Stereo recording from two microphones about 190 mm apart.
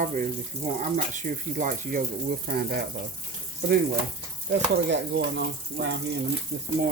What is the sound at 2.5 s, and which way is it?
Speech, 60° right (ahead or behind).